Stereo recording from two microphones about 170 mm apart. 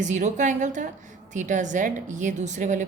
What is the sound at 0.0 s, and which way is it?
A woman's voice, 45° right (ahead or behind).